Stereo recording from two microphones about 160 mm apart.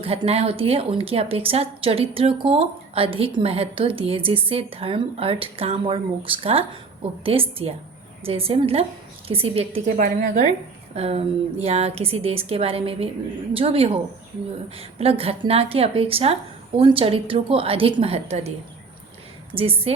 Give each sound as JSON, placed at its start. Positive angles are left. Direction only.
{"t": 0.0, "sound": "a woman's voice", "side_deg": -40}
{"t": 10.0, "sound": "a woman's voice", "side_deg": -55}
{"t": 10.9, "sound": "a woman's voice", "side_deg": -40}
{"t": 19.5, "sound": "a woman's voice", "side_deg": -35}